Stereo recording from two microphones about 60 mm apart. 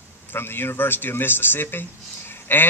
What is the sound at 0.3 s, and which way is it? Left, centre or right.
A man's voice, left.